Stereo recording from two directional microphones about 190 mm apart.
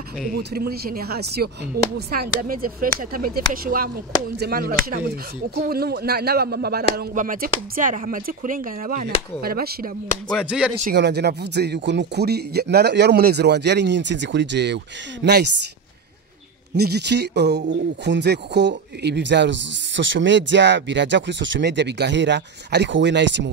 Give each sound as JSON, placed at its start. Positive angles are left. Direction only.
{"t": 0.3, "sound": "speech", "side_deg": -55}
{"t": 10.4, "sound": "speech", "side_deg": -5}
{"t": 11.0, "sound": "speech", "side_deg": -60}
{"t": 16.7, "sound": "speech", "side_deg": -60}